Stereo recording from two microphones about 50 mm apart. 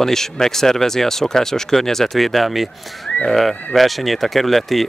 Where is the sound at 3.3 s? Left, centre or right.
Centre.